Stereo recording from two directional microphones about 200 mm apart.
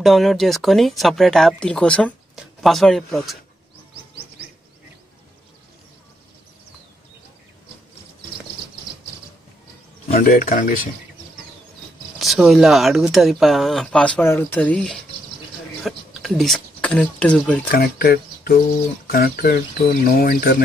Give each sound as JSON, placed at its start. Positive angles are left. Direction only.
{"t": 0.0, "sound": "speech", "side_deg": 0}
{"t": 10.1, "sound": "speech", "side_deg": 45}
{"t": 12.2, "sound": "speech", "side_deg": 0}
{"t": 17.6, "sound": "speech", "side_deg": 50}